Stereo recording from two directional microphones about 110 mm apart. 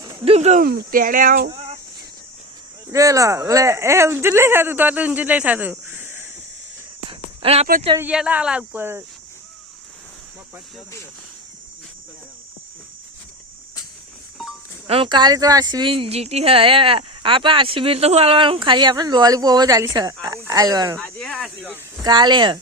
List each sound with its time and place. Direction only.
0.3 s speech: 85° right
2.9 s speech: 30° right (ahead or behind)
7.1 s a sound: 65° right (ahead or behind)
8.1 s speech: 5° right (ahead or behind)
14.8 s speech: 60° right (ahead or behind)
15.1 s speech: 40° right (ahead or behind)
21.0 s speech: 5° left (ahead or behind)
22.0 s speech: 40° right (ahead or behind)